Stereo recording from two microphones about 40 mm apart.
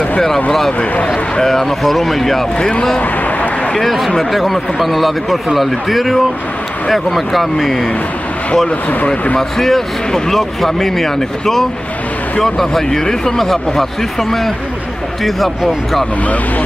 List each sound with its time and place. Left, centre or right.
0.5 s speech: centre
0.7 s speech: left
1.1 s speech: centre
2.6 s speech: centre
3.0 s a sound: left
3.7 s speech: centre
8.6 s speech: left
9.4 s speech: centre
15.2 s speech: centre